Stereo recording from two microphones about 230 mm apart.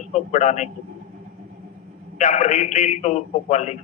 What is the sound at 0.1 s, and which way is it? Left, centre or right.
Speech, left.